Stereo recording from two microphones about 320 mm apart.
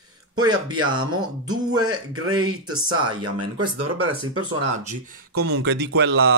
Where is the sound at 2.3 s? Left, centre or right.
Right.